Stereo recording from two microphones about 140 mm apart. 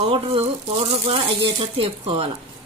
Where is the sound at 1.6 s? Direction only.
40° right (ahead or behind).